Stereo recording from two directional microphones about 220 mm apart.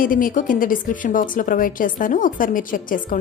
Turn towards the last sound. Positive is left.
turn(degrees=40)  # may be behind; listen again after turning